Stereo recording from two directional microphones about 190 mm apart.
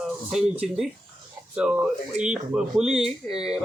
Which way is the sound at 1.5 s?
5° right (ahead or behind).